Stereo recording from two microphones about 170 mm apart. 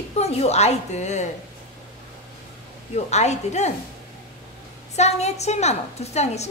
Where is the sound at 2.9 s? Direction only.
40° left (ahead or behind).